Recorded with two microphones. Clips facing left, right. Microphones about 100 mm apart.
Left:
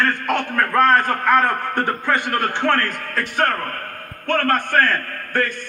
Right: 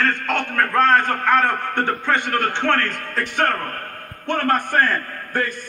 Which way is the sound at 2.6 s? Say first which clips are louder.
Left 1 dB; 35° left (ahead or behind).